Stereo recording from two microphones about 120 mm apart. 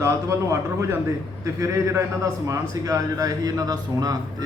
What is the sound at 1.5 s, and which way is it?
A man's voice, 25° right (ahead or behind).